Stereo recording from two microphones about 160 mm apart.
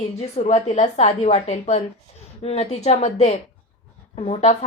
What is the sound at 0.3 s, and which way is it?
Speech, 40° left (ahead or behind).